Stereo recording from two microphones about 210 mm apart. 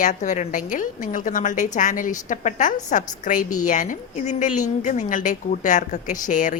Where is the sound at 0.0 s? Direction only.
35° left (ahead or behind).